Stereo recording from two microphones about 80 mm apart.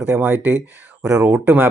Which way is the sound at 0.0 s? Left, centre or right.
Right.